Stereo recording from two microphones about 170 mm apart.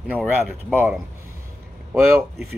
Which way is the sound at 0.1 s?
10° right (ahead or behind).